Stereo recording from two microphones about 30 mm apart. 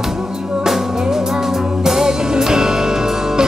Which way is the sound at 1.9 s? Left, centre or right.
Centre.